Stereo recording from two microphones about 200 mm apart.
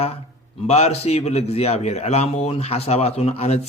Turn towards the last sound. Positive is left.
turn(degrees=30)  # may be behind; listen again after turning